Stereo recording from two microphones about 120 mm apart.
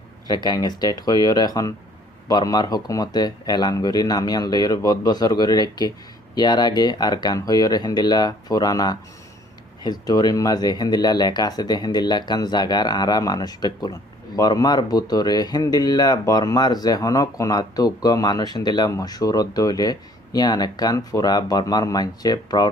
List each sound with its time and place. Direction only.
0.3 s speech: 35° left (ahead or behind)